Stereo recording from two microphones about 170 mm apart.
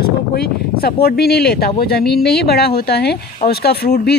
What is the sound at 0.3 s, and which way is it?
Speech, 65° left (ahead or behind).